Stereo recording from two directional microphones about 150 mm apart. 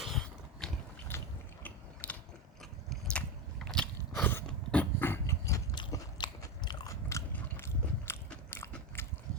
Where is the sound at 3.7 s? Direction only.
10° left (ahead or behind).